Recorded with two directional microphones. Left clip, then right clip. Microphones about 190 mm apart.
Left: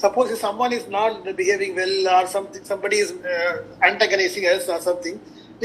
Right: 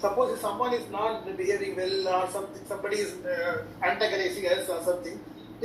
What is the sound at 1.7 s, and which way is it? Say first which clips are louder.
A man's voice: left 9 dB; 45° left (ahead or behind).